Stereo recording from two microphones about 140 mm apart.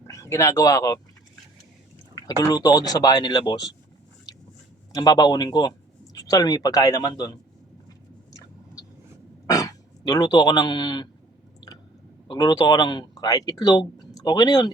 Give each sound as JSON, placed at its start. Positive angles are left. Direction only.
{"t": 0.1, "sound": "speech", "side_deg": 20}
{"t": 2.1, "sound": "speech", "side_deg": 25}
{"t": 4.3, "sound": "a sound", "side_deg": 25}
{"t": 4.9, "sound": "speech", "side_deg": 30}
{"t": 8.3, "sound": "a sound", "side_deg": 25}
{"t": 9.5, "sound": "speech", "side_deg": 25}
{"t": 12.3, "sound": "speech", "side_deg": 30}